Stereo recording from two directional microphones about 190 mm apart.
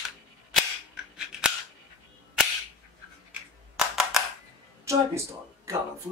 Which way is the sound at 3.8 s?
Centre (ahead or behind).